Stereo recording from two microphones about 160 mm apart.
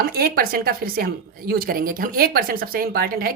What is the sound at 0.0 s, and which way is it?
Speech, 70° right (ahead or behind).